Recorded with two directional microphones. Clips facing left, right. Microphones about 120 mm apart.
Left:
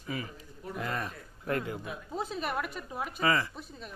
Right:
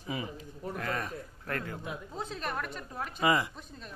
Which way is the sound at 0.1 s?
20° right (ahead or behind).